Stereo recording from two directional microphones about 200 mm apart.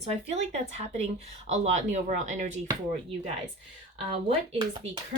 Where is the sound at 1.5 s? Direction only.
35° right (ahead or behind).